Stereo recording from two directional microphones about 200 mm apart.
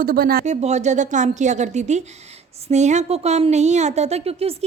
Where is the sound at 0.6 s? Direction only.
35° right (ahead or behind).